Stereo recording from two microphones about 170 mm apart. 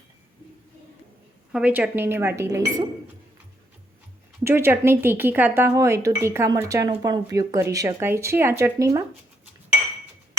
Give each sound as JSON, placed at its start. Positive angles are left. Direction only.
{"t": 1.5, "sound": "speech", "side_deg": -5}
{"t": 4.4, "sound": "speech", "side_deg": -15}